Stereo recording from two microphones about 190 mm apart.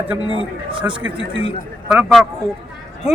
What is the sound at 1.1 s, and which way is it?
Speech, 70° right (ahead or behind).